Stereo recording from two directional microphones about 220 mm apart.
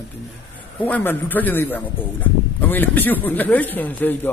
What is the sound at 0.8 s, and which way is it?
A man's voice, 5° left (ahead or behind).